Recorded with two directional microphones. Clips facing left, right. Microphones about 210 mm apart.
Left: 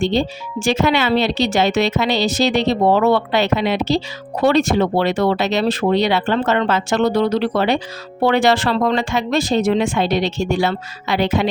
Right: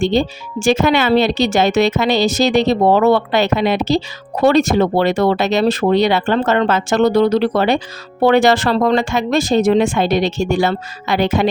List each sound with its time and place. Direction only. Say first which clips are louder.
0.0 s speech: right 2 dB; 45° right (ahead or behind)